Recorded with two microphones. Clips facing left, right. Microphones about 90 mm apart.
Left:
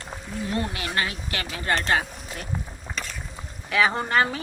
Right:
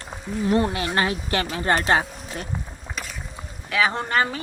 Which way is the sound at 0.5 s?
30° right (ahead or behind).